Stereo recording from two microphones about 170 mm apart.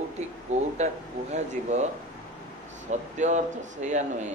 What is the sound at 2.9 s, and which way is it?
Speech, 45° right (ahead or behind).